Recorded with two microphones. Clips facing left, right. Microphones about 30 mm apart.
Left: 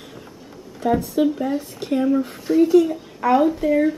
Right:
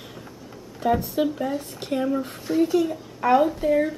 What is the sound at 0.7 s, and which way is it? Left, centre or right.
Speech, centre.